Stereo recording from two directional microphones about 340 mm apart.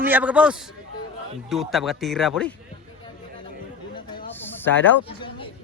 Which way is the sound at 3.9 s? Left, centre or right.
Centre.